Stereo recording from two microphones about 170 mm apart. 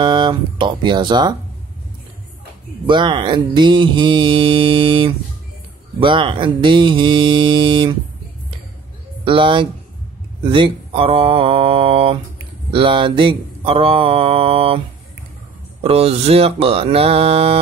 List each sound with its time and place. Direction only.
0.0 s mantra: 25° right (ahead or behind)
2.9 s mantra: 30° right (ahead or behind)
9.2 s speech: 30° right (ahead or behind)
10.4 s mantra: 30° right (ahead or behind)
15.8 s mantra: 35° right (ahead or behind)